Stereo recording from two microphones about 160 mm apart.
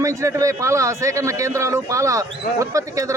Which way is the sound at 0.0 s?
20° right (ahead or behind).